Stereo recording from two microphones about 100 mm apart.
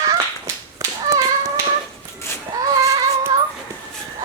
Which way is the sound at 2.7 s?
40° right (ahead or behind).